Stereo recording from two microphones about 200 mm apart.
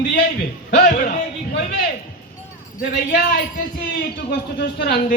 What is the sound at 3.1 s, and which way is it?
Speech, 45° left (ahead or behind).